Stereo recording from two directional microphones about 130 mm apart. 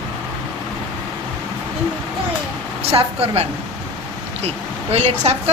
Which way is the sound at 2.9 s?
50° right (ahead or behind).